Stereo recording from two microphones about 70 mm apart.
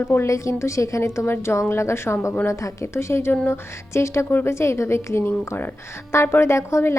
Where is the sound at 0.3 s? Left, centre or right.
Left.